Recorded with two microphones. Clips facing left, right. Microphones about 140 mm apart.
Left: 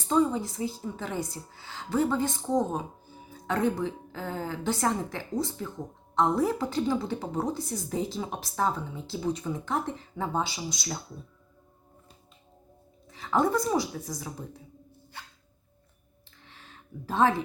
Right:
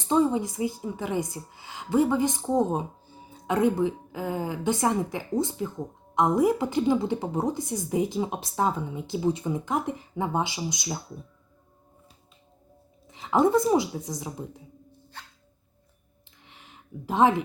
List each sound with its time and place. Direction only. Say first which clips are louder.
0.1 s a woman's voice: right 2 dB; 20° right (ahead or behind)
13.1 s speech: right 4 dB; 20° right (ahead or behind)
16.4 s a sound: even; 15° right (ahead or behind)